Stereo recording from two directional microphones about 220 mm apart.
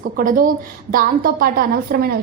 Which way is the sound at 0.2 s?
40° right (ahead or behind).